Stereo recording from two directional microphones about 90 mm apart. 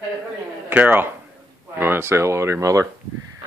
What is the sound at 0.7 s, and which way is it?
Speech, 20° right (ahead or behind).